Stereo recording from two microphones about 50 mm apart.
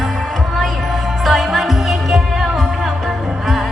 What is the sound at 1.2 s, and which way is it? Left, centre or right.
Music, centre.